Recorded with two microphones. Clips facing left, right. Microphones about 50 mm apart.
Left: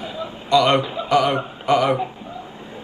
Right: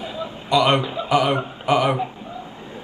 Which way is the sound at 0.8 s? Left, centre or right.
Centre.